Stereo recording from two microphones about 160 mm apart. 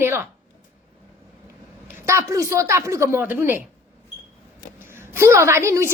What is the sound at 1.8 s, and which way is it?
A woman's voice, 20° right (ahead or behind).